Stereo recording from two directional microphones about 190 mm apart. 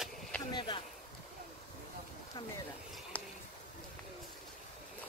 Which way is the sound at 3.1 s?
10° left (ahead or behind).